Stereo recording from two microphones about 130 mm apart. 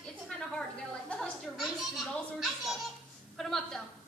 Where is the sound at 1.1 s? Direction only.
5° left (ahead or behind).